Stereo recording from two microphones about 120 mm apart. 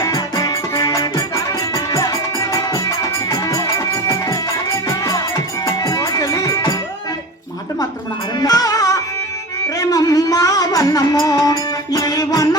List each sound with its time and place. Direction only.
0.0 s music: 30° left (ahead or behind)
8.4 s music: 30° left (ahead or behind)